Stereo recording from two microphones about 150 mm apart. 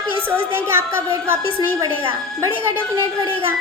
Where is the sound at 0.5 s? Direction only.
15° right (ahead or behind).